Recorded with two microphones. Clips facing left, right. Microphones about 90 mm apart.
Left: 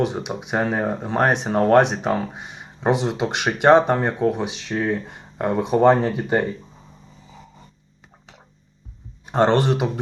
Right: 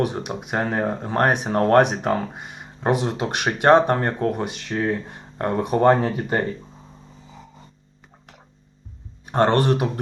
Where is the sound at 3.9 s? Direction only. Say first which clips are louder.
Left 2 dB; 10° left (ahead or behind).